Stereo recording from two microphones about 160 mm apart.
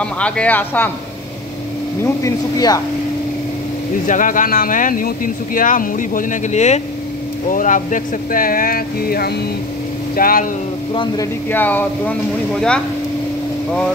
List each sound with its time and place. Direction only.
0.0 s speech: 5° left (ahead or behind)
2.2 s speech: 25° left (ahead or behind)
4.1 s speech: 55° left (ahead or behind)
10.9 s speech: 30° left (ahead or behind)
11.5 s speech: 10° left (ahead or behind)